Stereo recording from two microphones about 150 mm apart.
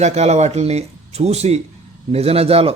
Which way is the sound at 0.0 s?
45° right (ahead or behind).